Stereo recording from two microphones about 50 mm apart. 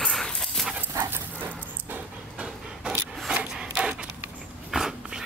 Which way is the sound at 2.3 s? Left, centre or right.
Centre.